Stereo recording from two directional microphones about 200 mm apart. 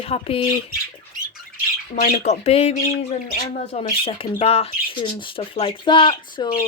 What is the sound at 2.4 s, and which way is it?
Speech, 30° left (ahead or behind).